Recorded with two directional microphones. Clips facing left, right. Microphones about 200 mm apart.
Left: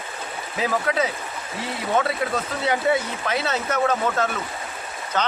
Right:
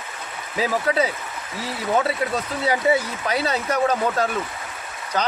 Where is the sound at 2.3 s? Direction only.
10° right (ahead or behind).